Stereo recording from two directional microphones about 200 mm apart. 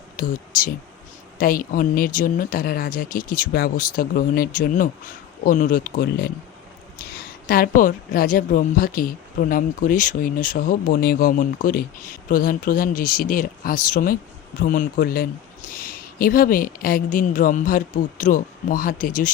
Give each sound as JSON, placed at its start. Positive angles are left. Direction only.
{"t": 0.2, "sound": "speech", "side_deg": 45}